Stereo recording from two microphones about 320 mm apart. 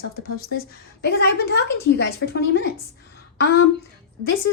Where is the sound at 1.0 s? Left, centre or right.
Left.